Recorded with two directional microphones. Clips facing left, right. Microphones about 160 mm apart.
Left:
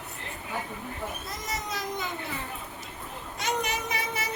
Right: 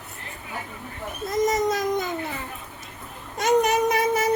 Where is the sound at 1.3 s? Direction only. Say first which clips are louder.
Right 13 dB; 45° right (ahead or behind).